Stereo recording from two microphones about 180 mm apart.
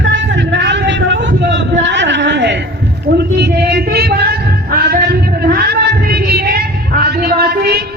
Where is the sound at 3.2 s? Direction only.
65° right (ahead or behind).